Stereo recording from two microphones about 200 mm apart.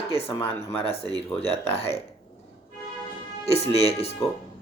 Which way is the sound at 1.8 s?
30° left (ahead or behind).